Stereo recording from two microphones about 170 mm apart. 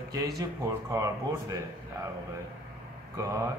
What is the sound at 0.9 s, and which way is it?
Speech, 20° right (ahead or behind).